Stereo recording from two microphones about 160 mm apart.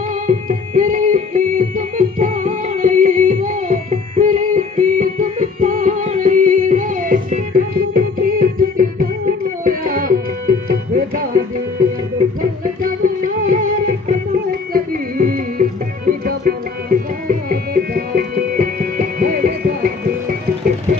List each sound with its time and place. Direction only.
0.3 s music: 55° right (ahead or behind)